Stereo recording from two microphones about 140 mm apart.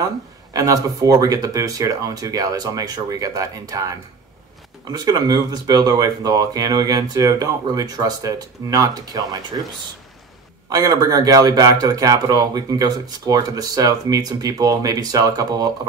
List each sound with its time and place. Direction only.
0.5 s speech: 25° right (ahead or behind)
10.7 s speech: 25° right (ahead or behind)